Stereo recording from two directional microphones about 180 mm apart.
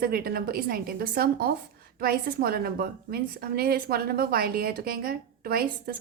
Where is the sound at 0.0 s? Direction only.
55° right (ahead or behind).